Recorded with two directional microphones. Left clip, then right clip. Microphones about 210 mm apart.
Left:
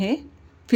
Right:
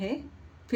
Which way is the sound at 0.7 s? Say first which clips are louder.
Left 9 dB; 45° left (ahead or behind).